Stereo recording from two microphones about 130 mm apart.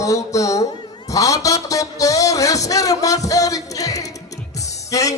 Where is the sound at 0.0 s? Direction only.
25° left (ahead or behind).